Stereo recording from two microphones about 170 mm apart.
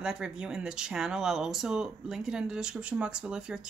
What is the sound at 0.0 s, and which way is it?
Speech, 5° right (ahead or behind).